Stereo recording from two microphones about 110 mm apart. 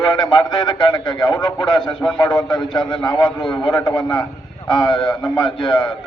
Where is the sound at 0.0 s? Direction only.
45° left (ahead or behind).